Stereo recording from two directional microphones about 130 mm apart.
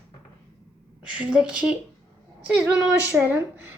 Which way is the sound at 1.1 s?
10° right (ahead or behind).